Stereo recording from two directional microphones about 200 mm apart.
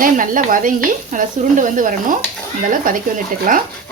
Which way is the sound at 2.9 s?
45° right (ahead or behind).